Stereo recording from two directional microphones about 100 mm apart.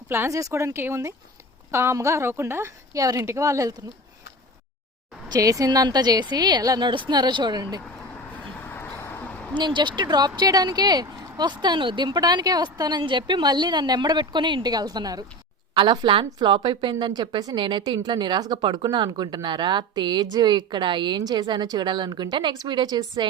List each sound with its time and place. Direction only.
0.1 s a woman's voice: 30° right (ahead or behind)
5.3 s a woman's voice: 35° right (ahead or behind)
8.6 s a sound: 20° left (ahead or behind)
9.6 s a woman's voice: 50° right (ahead or behind)
15.7 s a woman's voice: 50° right (ahead or behind)